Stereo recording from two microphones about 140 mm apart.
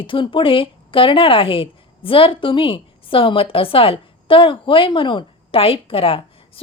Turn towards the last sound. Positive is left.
turn(degrees=40)  # may be behind; listen again after turning